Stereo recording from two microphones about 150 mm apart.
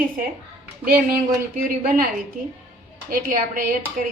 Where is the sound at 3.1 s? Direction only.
65° right (ahead or behind).